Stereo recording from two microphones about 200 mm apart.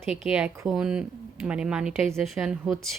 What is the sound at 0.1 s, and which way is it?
Speech, 5° right (ahead or behind).